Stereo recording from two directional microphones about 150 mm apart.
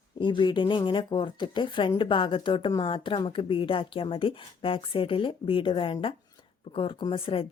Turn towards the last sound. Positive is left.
turn(degrees=40)  # may be behind; listen again after turning